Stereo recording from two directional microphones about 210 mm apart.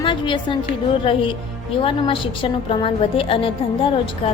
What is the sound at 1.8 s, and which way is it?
Speech, 25° left (ahead or behind).